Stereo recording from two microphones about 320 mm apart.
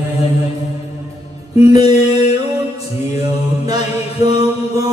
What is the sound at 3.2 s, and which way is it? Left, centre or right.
Mantra, centre.